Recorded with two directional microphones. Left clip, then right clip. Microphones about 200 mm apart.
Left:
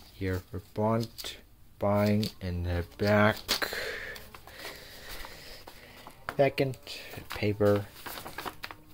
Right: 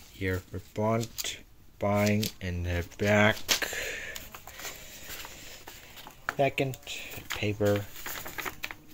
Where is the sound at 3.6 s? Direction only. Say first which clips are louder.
Even; 10° left (ahead or behind).